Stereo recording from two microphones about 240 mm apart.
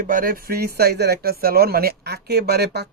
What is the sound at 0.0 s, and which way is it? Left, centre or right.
Speech, right.